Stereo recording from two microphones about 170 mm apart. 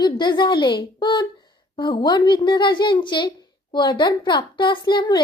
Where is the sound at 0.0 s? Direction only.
25° left (ahead or behind).